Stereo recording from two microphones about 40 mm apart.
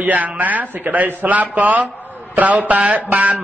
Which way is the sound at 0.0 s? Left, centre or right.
Right.